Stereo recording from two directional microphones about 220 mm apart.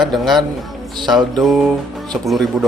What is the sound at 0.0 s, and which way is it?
Speech, centre (ahead or behind).